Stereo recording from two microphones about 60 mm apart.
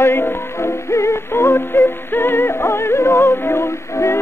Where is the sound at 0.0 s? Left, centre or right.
Left.